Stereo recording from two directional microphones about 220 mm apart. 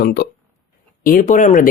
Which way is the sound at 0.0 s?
45° left (ahead or behind).